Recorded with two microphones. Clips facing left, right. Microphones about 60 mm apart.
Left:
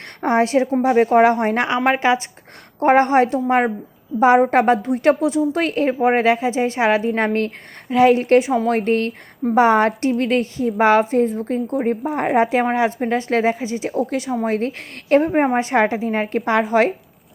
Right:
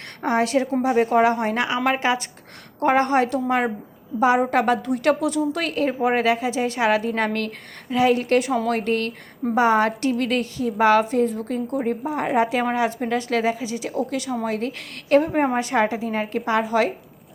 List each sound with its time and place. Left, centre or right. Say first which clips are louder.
0.2 s a woman's voice: left 4 dB; left